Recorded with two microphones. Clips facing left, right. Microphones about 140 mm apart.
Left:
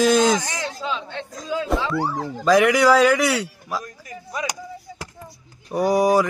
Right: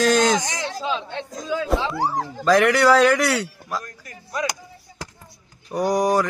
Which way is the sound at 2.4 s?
5° left (ahead or behind).